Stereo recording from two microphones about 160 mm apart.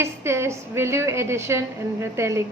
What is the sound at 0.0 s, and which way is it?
A woman's voice, 15° right (ahead or behind).